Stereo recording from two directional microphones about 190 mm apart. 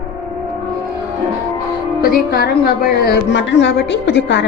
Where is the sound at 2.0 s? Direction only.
55° left (ahead or behind).